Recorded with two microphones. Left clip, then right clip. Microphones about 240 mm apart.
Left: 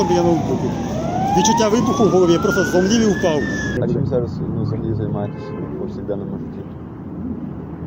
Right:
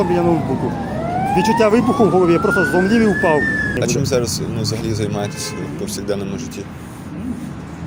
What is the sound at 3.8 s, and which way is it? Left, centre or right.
Speech, right.